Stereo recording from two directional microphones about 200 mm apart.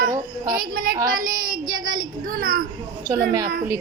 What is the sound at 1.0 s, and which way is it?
Child singing, 45° right (ahead or behind).